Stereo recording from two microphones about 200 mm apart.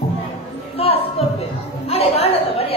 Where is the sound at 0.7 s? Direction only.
30° left (ahead or behind).